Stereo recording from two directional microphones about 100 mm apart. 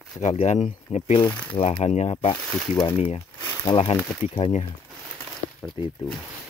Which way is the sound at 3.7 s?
55° left (ahead or behind).